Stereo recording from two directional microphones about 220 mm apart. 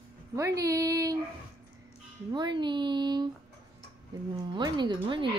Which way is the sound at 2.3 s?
20° right (ahead or behind).